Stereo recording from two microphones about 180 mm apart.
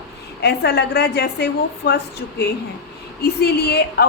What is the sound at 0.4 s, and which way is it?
A woman's voice, 65° left (ahead or behind).